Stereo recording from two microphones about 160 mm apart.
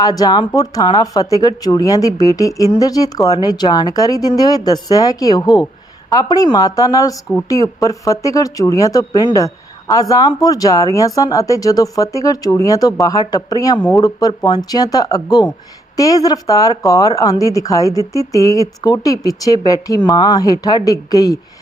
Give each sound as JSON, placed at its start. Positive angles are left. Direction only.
{"t": 0.0, "sound": "speech", "side_deg": 25}